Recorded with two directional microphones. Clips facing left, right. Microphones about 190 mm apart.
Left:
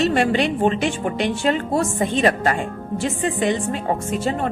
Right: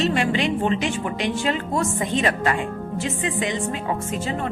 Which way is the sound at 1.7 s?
35° left (ahead or behind).